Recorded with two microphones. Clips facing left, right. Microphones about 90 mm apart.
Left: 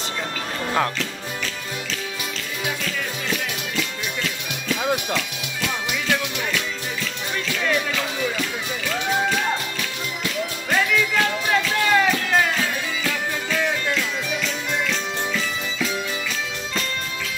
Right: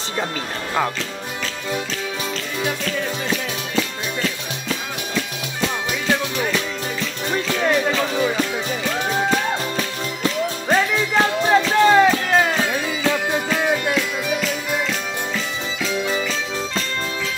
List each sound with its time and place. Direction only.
3.7 s music: 35° right (ahead or behind)
9.3 s music: 35° right (ahead or behind)